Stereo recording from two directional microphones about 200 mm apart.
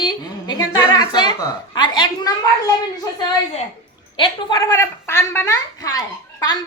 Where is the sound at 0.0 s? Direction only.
20° left (ahead or behind).